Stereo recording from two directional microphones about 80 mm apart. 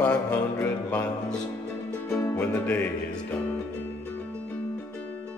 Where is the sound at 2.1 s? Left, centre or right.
Left.